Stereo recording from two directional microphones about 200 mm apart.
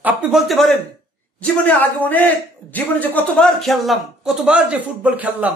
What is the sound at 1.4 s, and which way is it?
A man's voice, 10° left (ahead or behind).